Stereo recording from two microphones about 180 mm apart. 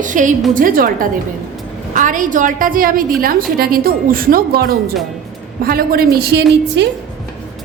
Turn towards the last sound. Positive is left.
turn(degrees=-60)  # may be behind; listen again after turning